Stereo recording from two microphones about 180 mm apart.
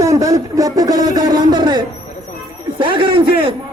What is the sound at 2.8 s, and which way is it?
Speech, 30° right (ahead or behind).